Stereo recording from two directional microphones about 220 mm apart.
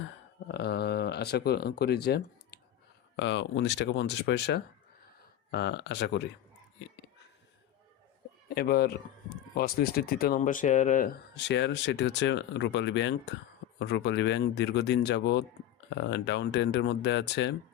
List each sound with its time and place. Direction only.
0.4 s speech: 50° left (ahead or behind)
2.0 s computer keyboard: 45° left (ahead or behind)
3.2 s speech: 55° left (ahead or behind)
8.4 s speech: 45° left (ahead or behind)